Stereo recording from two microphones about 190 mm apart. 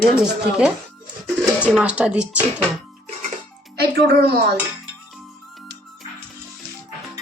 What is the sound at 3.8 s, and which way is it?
Speech, 60° right (ahead or behind).